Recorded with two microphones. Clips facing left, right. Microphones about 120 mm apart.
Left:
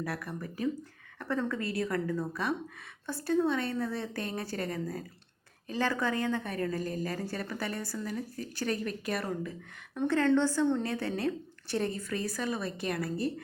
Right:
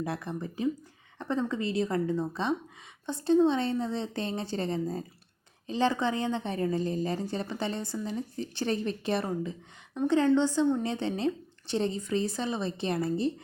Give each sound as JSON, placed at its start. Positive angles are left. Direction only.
{"t": 0.0, "sound": "a woman's voice", "side_deg": -25}